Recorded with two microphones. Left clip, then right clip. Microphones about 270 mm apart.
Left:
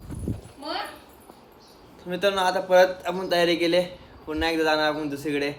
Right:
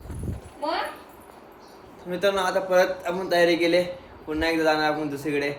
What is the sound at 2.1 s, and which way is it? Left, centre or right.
Speech, centre.